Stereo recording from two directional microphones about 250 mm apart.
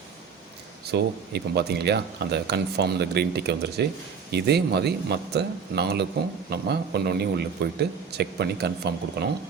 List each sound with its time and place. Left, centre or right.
0.9 s speech: right